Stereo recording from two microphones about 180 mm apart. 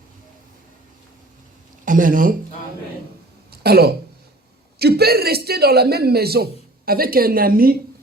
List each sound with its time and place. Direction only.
1.8 s speech: 50° right (ahead or behind)
3.5 s a man's voice: 60° right (ahead or behind)